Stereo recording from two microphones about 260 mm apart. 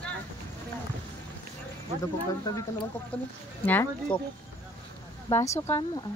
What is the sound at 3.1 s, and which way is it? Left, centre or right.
Speech, centre.